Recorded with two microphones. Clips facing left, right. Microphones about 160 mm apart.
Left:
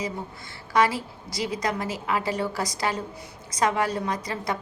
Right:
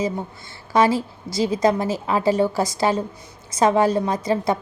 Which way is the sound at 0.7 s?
25° right (ahead or behind).